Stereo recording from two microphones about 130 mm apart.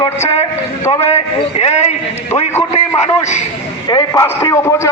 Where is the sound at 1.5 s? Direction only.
55° left (ahead or behind).